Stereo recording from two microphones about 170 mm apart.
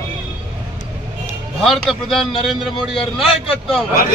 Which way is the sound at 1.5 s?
Centre (ahead or behind).